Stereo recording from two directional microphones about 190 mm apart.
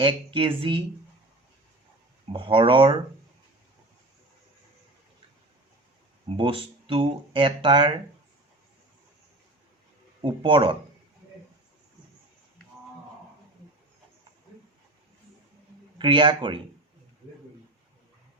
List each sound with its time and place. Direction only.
0.0 s speech: 25° right (ahead or behind)
2.3 s speech: 25° right (ahead or behind)
6.2 s speech: 30° right (ahead or behind)
10.2 s speech: 25° right (ahead or behind)
16.0 s speech: 25° right (ahead or behind)